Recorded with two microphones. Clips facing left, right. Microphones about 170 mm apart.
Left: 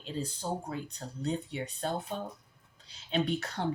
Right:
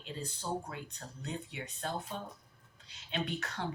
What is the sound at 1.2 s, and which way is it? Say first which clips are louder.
Speech: left 8 dB; 35° left (ahead or behind).